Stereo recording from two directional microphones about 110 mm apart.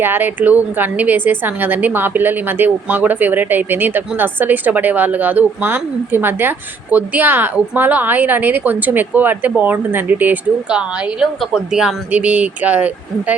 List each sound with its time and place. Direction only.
0.0 s a woman's voice: 20° right (ahead or behind)